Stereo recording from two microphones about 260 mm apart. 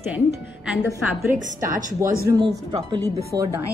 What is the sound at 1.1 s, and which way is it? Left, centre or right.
Speech, right.